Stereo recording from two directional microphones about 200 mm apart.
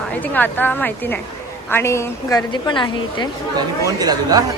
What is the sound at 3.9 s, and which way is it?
Speech, 20° right (ahead or behind).